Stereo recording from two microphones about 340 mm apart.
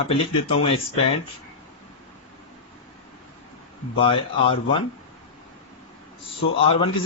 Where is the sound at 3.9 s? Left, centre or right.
Centre.